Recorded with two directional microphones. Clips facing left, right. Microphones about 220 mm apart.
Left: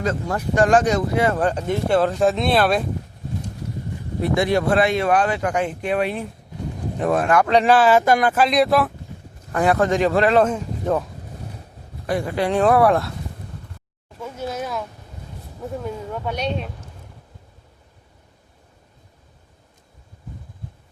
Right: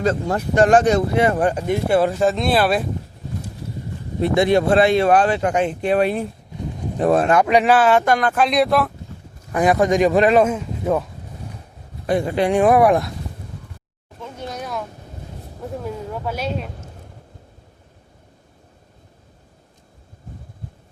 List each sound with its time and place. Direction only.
0.0 s speech: 30° right (ahead or behind); by 2.8 s 5° right (ahead or behind)
4.2 s speech: 25° right (ahead or behind)
5.9 s speech: 40° right (ahead or behind)
7.6 s speech: centre (ahead or behind)
9.5 s speech: 15° right (ahead or behind)
12.0 s speech: 25° right (ahead or behind)
14.2 s a sound: 5° left (ahead or behind)
15.8 s speech: 5° right (ahead or behind)